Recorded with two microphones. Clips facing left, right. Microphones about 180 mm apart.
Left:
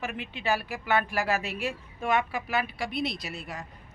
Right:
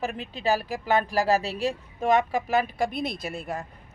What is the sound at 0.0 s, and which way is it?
A woman's voice, 35° right (ahead or behind).